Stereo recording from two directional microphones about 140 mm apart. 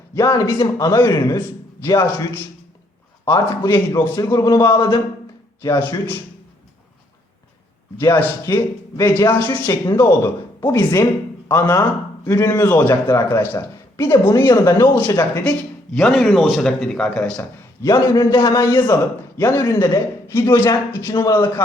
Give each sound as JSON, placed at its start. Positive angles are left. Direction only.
{"t": 0.1, "sound": "a man's voice", "side_deg": 20}
{"t": 7.9, "sound": "a man's voice", "side_deg": 15}
{"t": 16.0, "sound": "speech", "side_deg": 0}
{"t": 17.8, "sound": "a man's voice", "side_deg": 25}